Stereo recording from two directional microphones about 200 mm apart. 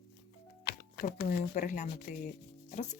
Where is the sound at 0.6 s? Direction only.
50° left (ahead or behind).